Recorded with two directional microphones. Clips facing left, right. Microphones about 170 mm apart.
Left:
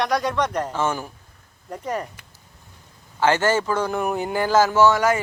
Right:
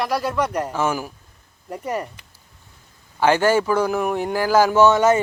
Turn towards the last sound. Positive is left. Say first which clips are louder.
# right 3 dB
turn(degrees=-25)  # may be behind; listen again after turning